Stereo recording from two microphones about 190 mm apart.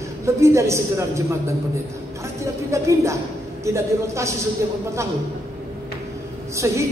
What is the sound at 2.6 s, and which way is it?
A man's voice, 15° right (ahead or behind).